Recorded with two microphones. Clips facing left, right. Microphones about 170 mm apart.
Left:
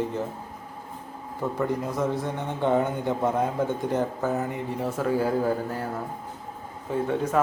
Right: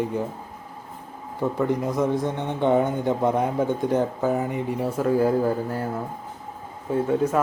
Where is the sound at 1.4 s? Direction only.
20° right (ahead or behind).